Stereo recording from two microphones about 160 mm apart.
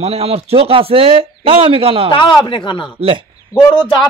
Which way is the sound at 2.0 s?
30° left (ahead or behind).